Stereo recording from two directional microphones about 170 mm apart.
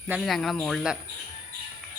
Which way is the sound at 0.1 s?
Centre (ahead or behind).